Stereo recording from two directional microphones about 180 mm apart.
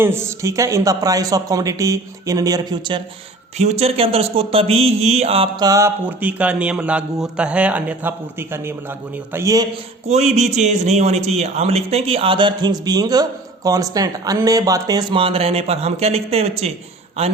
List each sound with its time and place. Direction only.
0.0 s speech: 15° right (ahead or behind)
3.6 s mantra: 35° right (ahead or behind); by 9.6 s 15° right (ahead or behind)
10.1 s a man's voice: 40° right (ahead or behind)